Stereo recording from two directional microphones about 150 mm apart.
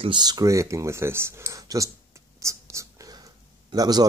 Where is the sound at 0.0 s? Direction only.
30° right (ahead or behind).